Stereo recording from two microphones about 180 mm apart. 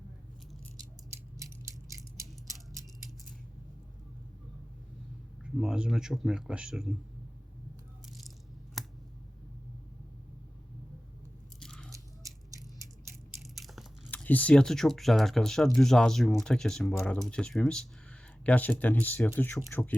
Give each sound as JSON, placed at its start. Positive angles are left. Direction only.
{"t": 1.4, "sound": "a sound", "side_deg": -15}
{"t": 5.4, "sound": "speech", "side_deg": -5}
{"t": 8.8, "sound": "a sound", "side_deg": 0}
{"t": 11.6, "sound": "biting", "side_deg": 5}
{"t": 11.9, "sound": "biting", "side_deg": -20}
{"t": 13.6, "sound": "biting", "side_deg": 0}
{"t": 14.1, "sound": "speech", "side_deg": 10}